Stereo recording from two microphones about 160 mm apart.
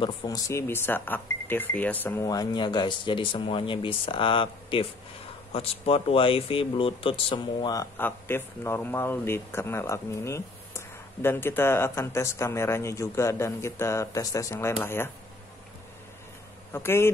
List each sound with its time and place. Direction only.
0.0 s speech: 25° left (ahead or behind)
2.2 s speech: 25° left (ahead or behind)
8.0 s speech: 15° left (ahead or behind)
16.7 s speech: 15° left (ahead or behind)